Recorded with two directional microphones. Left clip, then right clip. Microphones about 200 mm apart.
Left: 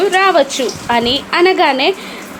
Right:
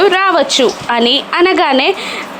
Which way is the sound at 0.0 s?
20° right (ahead or behind).